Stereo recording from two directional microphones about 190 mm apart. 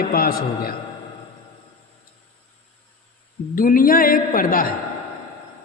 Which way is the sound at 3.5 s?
45° left (ahead or behind).